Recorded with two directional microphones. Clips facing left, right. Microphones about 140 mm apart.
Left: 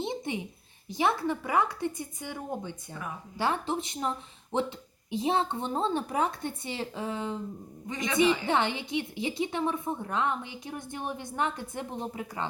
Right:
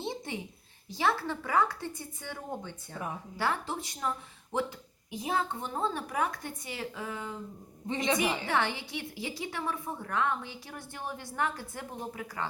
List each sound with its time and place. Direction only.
0.0 s a sound: 20° left (ahead or behind)
0.9 s a woman's voice: 20° left (ahead or behind)
7.9 s a man's voice: 30° right (ahead or behind)
8.4 s a woman's voice: 20° left (ahead or behind)